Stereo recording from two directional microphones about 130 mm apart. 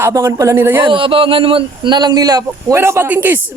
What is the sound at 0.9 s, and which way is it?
Speech, 40° right (ahead or behind).